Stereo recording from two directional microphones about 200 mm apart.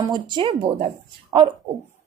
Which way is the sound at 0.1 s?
20° right (ahead or behind).